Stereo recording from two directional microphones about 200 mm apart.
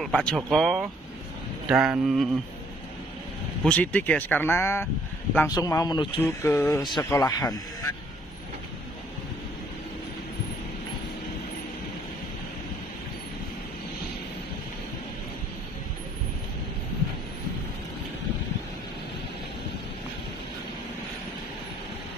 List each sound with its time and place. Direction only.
0.0 s speech: centre (ahead or behind)
3.6 s speech: 5° left (ahead or behind)